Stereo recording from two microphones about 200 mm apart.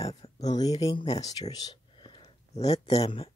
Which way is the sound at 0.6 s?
20° left (ahead or behind).